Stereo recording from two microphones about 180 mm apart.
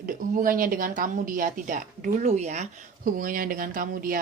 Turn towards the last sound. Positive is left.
turn(degrees=-50)  # may be behind; listen again after turning